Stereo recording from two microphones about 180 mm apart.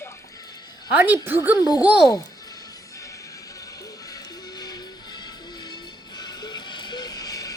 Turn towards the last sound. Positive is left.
turn(degrees=20)  # may be behind; listen again after turning